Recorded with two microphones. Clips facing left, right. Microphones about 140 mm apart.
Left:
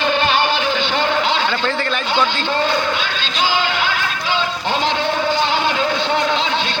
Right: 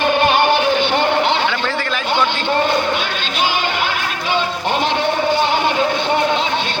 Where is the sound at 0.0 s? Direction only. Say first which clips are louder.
Right 3 dB; 50° right (ahead or behind).